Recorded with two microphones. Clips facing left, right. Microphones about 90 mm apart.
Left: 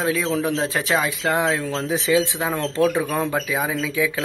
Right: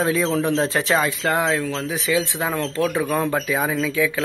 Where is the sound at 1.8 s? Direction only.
30° left (ahead or behind).